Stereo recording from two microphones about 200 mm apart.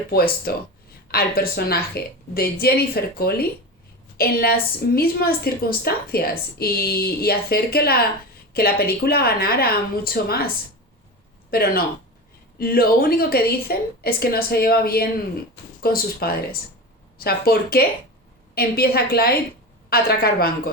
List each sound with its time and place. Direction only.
0.5 s a woman's voice: 50° left (ahead or behind)
11.5 s a woman's voice: 50° left (ahead or behind)